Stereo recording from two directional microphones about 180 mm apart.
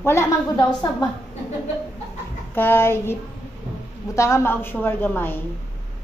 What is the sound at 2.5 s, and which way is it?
A woman's voice, 10° left (ahead or behind).